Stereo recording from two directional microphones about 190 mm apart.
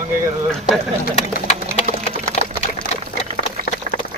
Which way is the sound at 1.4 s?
40° left (ahead or behind).